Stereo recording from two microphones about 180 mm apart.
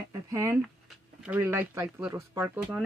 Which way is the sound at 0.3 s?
15° right (ahead or behind).